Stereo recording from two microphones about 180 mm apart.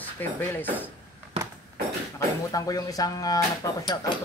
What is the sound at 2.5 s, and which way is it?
Speech, 20° left (ahead or behind).